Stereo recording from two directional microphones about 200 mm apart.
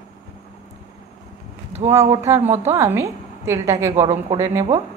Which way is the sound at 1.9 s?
15° right (ahead or behind).